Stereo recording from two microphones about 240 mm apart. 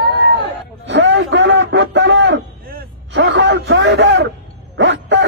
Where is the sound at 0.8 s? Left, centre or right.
Right.